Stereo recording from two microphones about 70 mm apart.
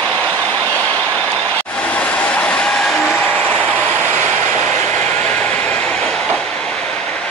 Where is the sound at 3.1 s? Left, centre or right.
Left.